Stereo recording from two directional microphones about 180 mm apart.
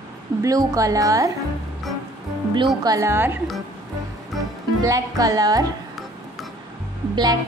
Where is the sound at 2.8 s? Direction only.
20° right (ahead or behind).